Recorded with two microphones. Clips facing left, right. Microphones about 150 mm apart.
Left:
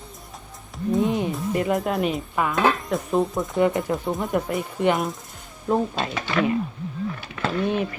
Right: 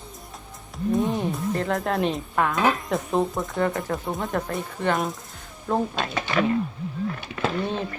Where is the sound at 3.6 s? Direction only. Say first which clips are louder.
Left 5 dB; 15° left (ahead or behind).